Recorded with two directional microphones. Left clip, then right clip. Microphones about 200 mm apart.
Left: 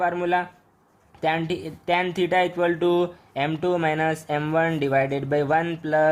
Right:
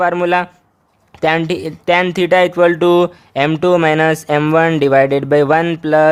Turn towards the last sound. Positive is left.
turn(degrees=-50)  # may be behind; listen again after turning